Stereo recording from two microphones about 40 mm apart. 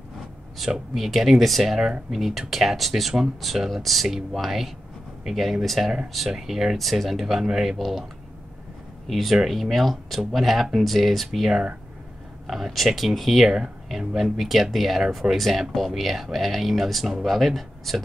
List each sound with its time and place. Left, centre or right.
0.9 s speech: centre
1.8 s speech: centre
2.1 s speech: centre
9.0 s speech: centre